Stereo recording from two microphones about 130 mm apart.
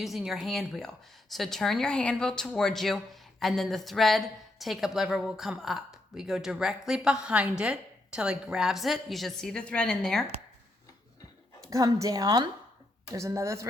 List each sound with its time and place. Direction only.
0.0 s speech: centre (ahead or behind)
11.7 s a woman's voice: 25° right (ahead or behind)